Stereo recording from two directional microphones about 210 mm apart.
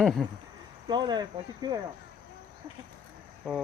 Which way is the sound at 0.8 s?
20° right (ahead or behind).